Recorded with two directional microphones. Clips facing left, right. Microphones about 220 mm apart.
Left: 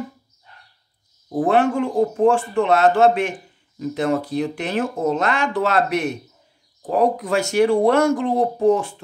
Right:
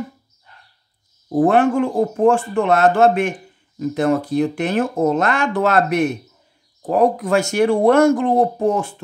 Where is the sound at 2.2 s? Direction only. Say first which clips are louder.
Right 3 dB; 50° right (ahead or behind).